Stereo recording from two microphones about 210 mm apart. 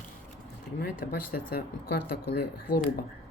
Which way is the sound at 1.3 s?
45° left (ahead or behind).